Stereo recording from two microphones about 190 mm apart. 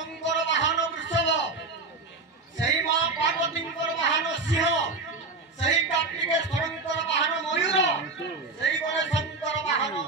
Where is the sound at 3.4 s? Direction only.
70° left (ahead or behind).